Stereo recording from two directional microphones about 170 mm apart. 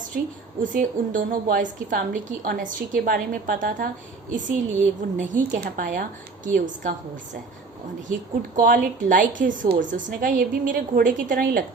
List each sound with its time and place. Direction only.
0.6 s a woman's voice: 50° right (ahead or behind)
8.0 s a woman's voice: 50° right (ahead or behind)